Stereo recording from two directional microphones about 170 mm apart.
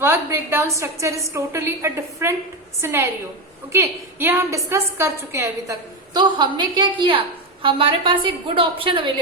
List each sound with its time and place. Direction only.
0.0 s a woman's voice: 15° right (ahead or behind); by 9.1 s 30° right (ahead or behind)